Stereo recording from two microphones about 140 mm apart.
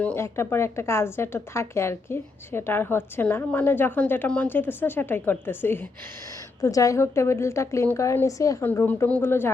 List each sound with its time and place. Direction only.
0.0 s a woman's voice: 15° left (ahead or behind)